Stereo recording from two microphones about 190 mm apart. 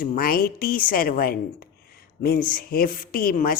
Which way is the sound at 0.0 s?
50° left (ahead or behind).